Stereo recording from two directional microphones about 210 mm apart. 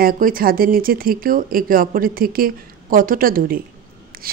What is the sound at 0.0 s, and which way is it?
A woman's voice, 40° right (ahead or behind).